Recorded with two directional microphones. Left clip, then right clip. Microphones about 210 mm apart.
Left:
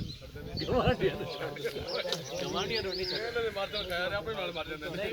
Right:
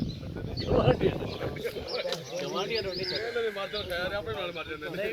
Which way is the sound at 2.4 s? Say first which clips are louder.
Right 2 dB; 30° left (ahead or behind).